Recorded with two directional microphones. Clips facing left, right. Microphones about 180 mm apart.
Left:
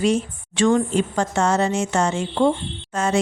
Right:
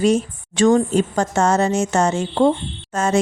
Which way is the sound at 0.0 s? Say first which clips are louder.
Right 3 dB; 40° right (ahead or behind).